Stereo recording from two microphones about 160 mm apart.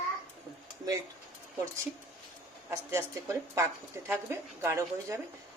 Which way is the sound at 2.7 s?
20° right (ahead or behind).